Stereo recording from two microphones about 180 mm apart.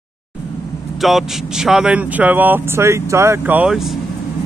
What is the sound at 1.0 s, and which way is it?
Speech, centre (ahead or behind).